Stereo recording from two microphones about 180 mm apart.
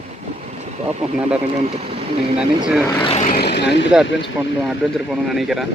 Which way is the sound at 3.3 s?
60° left (ahead or behind).